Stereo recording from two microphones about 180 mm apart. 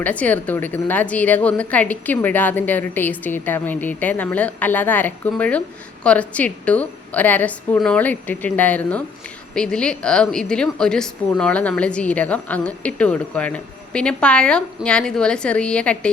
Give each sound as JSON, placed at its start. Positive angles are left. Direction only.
{"t": 0.0, "sound": "a woman's voice", "side_deg": 10}